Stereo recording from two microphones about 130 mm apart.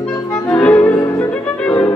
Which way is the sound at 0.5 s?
10° left (ahead or behind).